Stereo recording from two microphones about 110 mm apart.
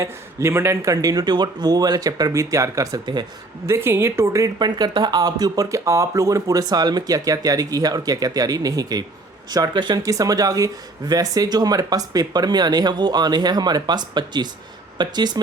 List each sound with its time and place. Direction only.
0.0 s speech: 25° right (ahead or behind)
3.7 s speech: 20° right (ahead or behind); by 15.4 s 40° right (ahead or behind)